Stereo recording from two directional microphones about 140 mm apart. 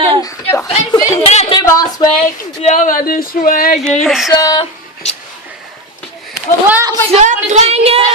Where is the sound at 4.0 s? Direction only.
Centre (ahead or behind).